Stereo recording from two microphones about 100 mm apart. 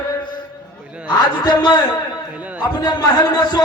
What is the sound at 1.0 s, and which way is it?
Speech, 45° left (ahead or behind).